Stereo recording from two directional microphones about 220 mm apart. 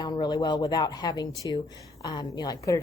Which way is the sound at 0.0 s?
20° left (ahead or behind).